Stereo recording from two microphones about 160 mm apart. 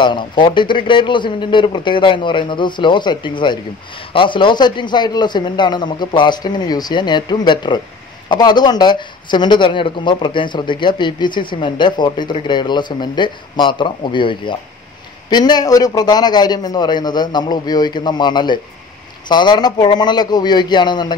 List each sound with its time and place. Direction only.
0.0 s speech: 30° left (ahead or behind)